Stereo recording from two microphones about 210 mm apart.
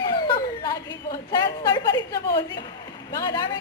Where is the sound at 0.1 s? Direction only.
20° left (ahead or behind).